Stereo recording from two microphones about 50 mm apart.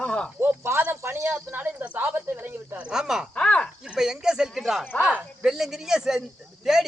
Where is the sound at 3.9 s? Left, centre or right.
Centre.